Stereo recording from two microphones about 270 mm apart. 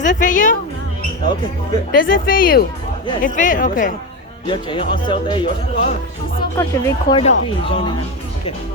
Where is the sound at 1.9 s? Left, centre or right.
Left.